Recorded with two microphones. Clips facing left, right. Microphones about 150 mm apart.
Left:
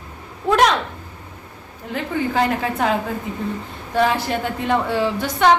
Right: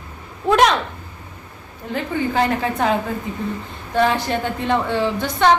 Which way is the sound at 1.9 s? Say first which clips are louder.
Even; centre (ahead or behind).